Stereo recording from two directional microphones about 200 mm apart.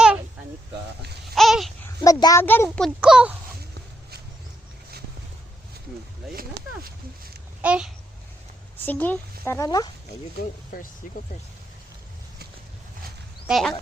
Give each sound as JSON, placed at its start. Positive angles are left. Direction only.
{"t": 1.4, "sound": "babbling", "side_deg": 0}
{"t": 2.0, "sound": "a child's voice", "side_deg": 20}
{"t": 7.6, "sound": "a child's voice", "side_deg": -5}
{"t": 8.8, "sound": "a child's voice", "side_deg": 10}
{"t": 10.3, "sound": "speech", "side_deg": 45}
{"t": 13.5, "sound": "speech", "side_deg": 0}